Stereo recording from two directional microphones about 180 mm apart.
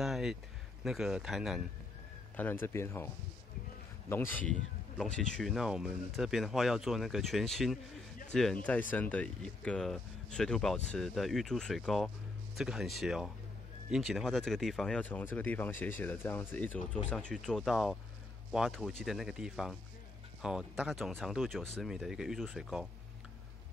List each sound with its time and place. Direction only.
0.0 s a sound: centre (ahead or behind)
0.8 s speech: 5° right (ahead or behind)
2.3 s speech: 10° left (ahead or behind)
4.5 s speech: 5° left (ahead or behind)